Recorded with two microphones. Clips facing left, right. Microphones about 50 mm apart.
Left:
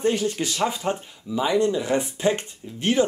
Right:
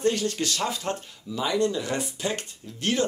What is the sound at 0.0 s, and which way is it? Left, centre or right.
Speech, centre.